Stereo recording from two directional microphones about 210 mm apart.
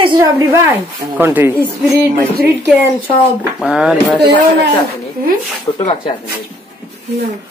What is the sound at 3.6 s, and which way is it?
Speech, 5° right (ahead or behind).